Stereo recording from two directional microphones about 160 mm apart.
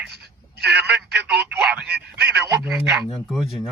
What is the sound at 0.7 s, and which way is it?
Telephone, 5° right (ahead or behind).